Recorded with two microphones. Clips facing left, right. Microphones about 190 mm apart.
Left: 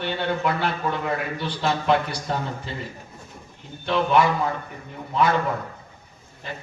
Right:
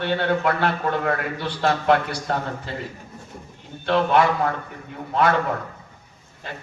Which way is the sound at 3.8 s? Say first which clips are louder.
Right 1 dB; 65° right (ahead or behind).